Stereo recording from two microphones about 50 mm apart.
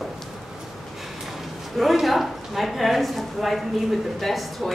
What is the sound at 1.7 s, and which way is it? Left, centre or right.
A woman's voice, centre.